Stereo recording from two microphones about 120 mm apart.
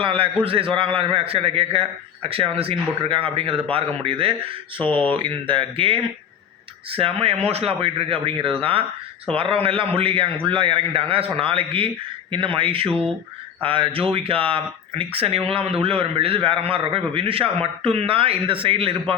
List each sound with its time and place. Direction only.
0.0 s speech: 50° right (ahead or behind)